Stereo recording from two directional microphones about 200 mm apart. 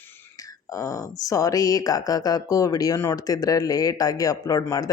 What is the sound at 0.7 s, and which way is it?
Speech, 15° left (ahead or behind).